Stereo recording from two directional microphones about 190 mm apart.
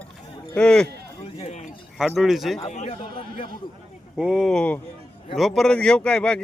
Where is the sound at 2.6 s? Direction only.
35° left (ahead or behind).